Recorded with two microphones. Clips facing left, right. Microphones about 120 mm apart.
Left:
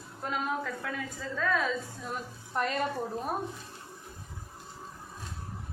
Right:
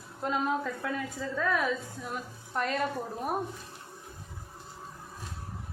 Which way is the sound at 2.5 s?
Centre (ahead or behind).